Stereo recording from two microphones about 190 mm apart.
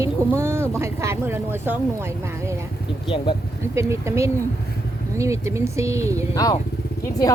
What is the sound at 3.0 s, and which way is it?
Speech, 25° left (ahead or behind).